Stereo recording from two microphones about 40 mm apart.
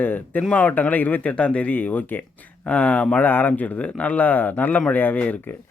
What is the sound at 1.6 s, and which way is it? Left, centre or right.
Speech, left.